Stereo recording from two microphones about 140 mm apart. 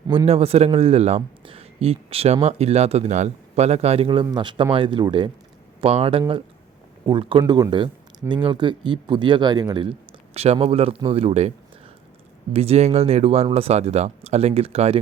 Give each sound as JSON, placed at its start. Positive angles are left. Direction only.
{"t": 0.3, "sound": "a man's voice", "side_deg": -45}
{"t": 12.5, "sound": "speech", "side_deg": -45}